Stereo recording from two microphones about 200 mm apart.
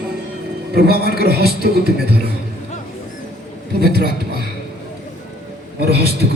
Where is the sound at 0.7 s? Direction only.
55° right (ahead or behind).